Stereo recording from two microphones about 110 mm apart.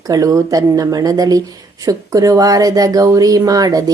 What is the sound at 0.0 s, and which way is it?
Speech, 30° right (ahead or behind).